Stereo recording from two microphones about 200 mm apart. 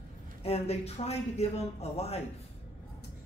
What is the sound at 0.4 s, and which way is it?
Speech, 30° left (ahead or behind).